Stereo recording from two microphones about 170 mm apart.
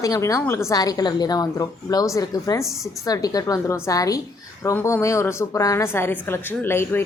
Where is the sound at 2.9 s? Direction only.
20° left (ahead or behind).